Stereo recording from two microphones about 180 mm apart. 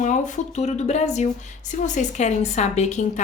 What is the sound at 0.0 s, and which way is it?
Speech, 40° left (ahead or behind).